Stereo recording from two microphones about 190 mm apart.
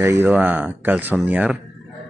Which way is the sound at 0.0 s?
15° right (ahead or behind).